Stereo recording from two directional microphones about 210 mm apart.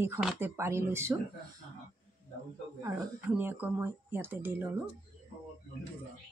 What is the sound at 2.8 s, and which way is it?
Speech, 10° right (ahead or behind).